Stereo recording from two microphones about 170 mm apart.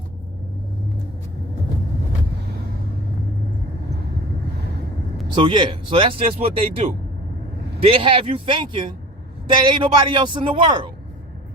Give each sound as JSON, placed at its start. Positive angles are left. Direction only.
{"t": 5.3, "sound": "a man's voice", "side_deg": -25}